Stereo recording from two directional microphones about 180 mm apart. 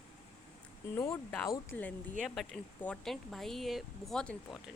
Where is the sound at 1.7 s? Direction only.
5° left (ahead or behind).